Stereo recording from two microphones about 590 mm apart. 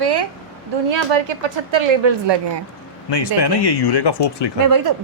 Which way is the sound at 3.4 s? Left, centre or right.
Left.